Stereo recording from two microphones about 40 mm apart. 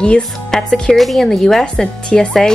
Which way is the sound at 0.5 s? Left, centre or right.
Centre.